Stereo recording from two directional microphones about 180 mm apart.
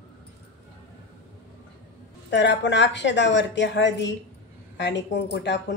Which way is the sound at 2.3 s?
80° left.